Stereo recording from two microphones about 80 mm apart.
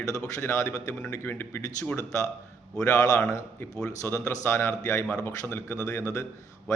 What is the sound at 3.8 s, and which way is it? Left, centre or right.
A man's voice, left.